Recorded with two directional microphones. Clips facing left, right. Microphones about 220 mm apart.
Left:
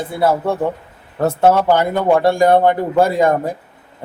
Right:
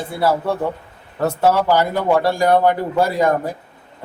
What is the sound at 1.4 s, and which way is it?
Speech, 25° left (ahead or behind).